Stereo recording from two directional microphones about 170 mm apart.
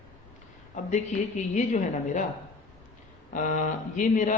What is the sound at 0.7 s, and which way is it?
A man's voice, 45° left (ahead or behind).